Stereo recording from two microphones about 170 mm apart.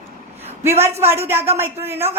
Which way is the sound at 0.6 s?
15° right (ahead or behind).